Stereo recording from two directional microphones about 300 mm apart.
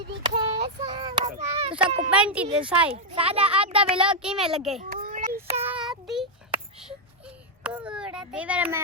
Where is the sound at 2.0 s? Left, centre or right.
Centre.